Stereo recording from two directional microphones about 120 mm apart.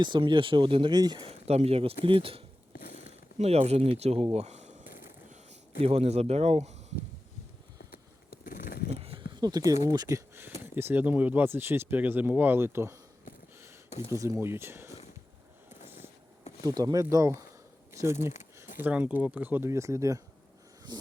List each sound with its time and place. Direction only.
0.0 s speech: 40° right (ahead or behind)
1.2 s speech: 60° right (ahead or behind)
3.3 s speech: 60° right (ahead or behind)
9.0 s a sound: 55° right (ahead or behind)
9.3 s speech: 35° right (ahead or behind)
14.1 s speech: 25° right (ahead or behind)
16.6 s speech: 35° right (ahead or behind)
20.9 s a sound: 35° right (ahead or behind)